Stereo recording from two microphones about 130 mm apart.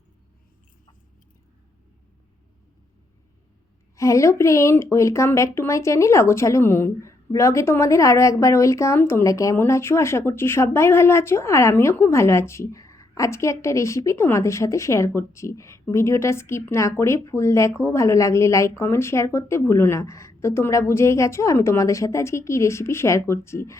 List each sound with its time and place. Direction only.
3.9 s speech: 25° left (ahead or behind)